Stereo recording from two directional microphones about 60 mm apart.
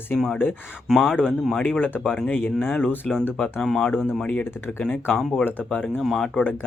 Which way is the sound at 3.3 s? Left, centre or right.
Centre.